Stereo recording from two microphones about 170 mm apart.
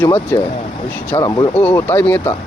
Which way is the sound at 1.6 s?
10° left (ahead or behind).